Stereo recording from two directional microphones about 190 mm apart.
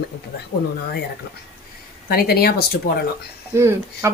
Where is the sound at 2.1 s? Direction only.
55° left (ahead or behind).